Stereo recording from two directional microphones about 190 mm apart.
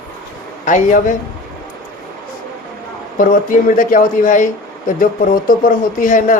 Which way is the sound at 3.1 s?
45° left (ahead or behind).